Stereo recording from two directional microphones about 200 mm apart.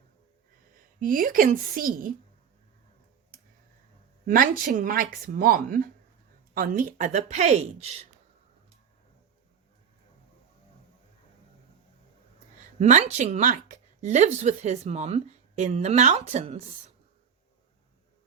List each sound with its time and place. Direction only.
0.9 s speech: 45° right (ahead or behind)
4.3 s speech: 45° right (ahead or behind)
12.8 s speech: 35° right (ahead or behind)